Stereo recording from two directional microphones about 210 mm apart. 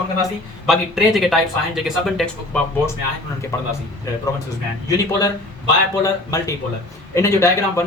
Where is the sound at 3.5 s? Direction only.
15° left (ahead or behind).